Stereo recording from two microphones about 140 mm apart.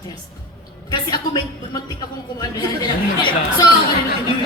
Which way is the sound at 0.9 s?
30° left (ahead or behind).